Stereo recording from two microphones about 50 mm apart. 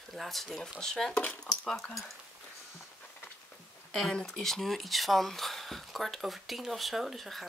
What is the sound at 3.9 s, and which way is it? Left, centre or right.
Speech, centre.